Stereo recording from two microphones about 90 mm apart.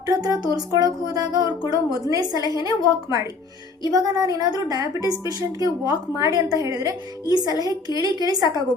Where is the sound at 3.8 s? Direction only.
45° right (ahead or behind).